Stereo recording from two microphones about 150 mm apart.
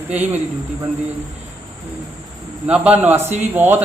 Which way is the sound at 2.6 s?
10° right (ahead or behind).